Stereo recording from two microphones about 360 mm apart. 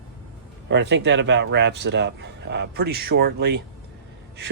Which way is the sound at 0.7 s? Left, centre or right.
Right.